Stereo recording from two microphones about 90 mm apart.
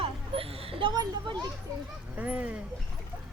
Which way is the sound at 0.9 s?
50° right (ahead or behind).